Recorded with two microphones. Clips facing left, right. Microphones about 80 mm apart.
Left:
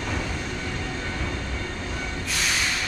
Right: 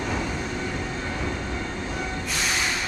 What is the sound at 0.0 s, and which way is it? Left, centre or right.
Vehicle, centre.